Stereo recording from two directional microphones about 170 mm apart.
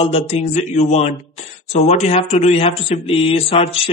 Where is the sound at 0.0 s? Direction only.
40° left (ahead or behind).